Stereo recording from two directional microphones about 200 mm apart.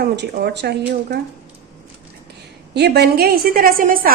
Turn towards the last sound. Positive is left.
turn(degrees=-45)  # may be behind; listen again after turning